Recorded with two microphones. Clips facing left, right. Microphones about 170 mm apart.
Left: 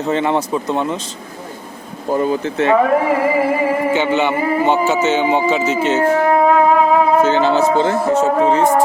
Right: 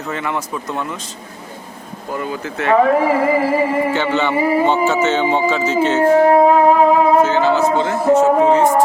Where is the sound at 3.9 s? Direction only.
15° left (ahead or behind).